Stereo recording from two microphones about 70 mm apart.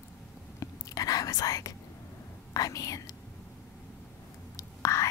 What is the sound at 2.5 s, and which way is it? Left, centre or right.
Speech, left.